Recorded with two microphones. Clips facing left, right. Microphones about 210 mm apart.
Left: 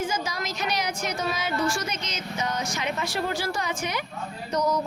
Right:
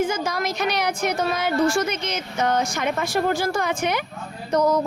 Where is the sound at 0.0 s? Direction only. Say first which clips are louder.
Right 6 dB; 55° right (ahead or behind).